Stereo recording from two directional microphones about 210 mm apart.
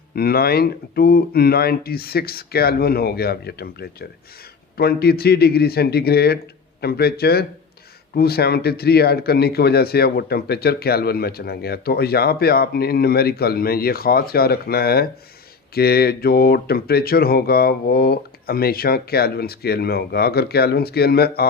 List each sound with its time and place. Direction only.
0.2 s a man's voice: 45° left (ahead or behind)